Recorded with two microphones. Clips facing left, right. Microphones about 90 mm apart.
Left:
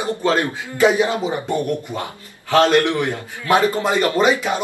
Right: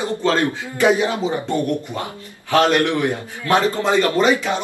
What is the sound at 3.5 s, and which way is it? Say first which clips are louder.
A man's voice: even; 15° left (ahead or behind).